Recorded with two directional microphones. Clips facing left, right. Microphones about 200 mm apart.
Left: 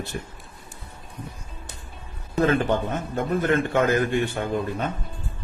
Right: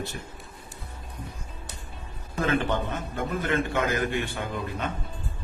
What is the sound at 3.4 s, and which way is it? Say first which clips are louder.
Speech: left 5 dB; 50° left (ahead or behind).